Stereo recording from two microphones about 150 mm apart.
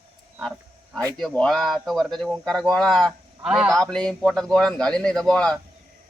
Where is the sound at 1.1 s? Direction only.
5° left (ahead or behind).